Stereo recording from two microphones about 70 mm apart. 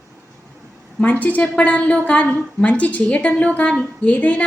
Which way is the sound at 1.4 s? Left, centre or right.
Centre.